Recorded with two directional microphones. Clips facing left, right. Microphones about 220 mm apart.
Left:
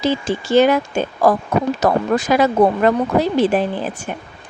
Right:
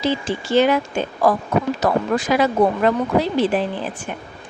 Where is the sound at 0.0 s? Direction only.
45° left (ahead or behind).